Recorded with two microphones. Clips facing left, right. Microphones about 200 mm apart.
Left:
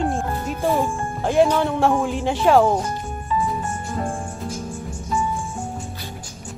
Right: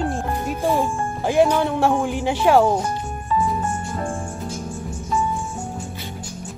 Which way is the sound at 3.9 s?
Centre (ahead or behind).